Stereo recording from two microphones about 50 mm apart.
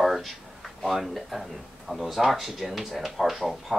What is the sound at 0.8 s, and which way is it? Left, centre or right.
Speech, centre.